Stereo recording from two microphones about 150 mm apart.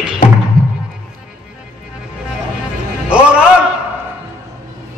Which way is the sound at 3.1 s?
5° right (ahead or behind).